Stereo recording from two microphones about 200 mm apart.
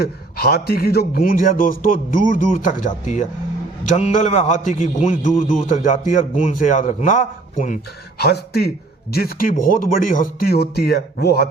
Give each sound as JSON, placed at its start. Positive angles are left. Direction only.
{"t": 0.0, "sound": "a man's voice", "side_deg": 50}
{"t": 8.2, "sound": "a man's voice", "side_deg": 55}